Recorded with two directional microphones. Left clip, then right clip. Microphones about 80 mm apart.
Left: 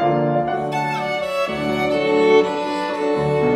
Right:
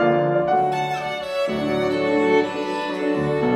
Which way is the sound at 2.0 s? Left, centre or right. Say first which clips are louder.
Left 5 dB; left.